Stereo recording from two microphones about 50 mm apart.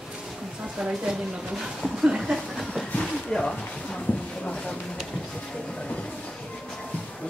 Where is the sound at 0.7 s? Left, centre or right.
Centre.